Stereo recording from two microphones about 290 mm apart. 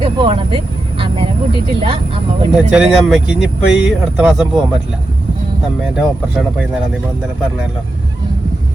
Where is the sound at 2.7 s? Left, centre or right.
Centre.